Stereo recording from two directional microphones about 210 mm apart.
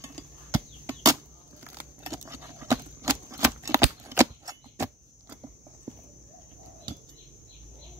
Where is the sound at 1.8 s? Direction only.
15° right (ahead or behind).